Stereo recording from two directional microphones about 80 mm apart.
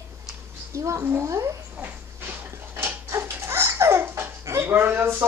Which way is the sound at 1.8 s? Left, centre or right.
Right.